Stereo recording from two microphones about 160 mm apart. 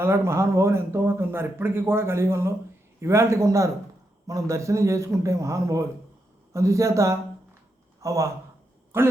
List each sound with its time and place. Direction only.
0.0 s a man's voice: 15° right (ahead or behind)